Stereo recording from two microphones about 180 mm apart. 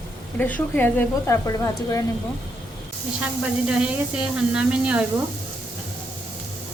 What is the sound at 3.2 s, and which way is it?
Speech, 5° right (ahead or behind).